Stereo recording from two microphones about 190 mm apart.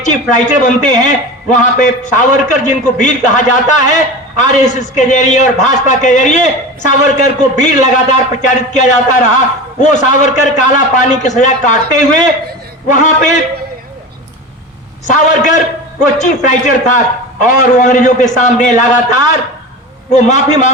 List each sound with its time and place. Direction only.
0.0 s a man's voice: 40° left (ahead or behind)
15.0 s a man's voice: 40° left (ahead or behind)